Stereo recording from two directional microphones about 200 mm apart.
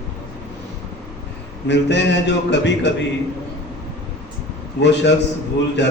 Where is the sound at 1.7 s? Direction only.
60° left (ahead or behind).